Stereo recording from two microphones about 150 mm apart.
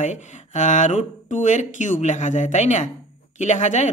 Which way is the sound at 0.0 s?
50° left (ahead or behind).